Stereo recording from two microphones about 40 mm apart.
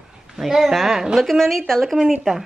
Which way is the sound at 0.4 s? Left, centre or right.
Centre.